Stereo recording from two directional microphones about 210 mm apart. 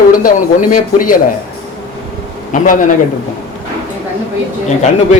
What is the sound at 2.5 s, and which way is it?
Speech, 40° left (ahead or behind).